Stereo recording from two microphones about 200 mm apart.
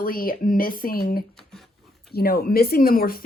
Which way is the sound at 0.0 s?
45° left (ahead or behind).